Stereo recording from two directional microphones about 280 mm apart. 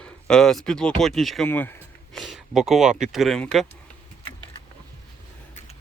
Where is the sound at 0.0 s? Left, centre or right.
Centre.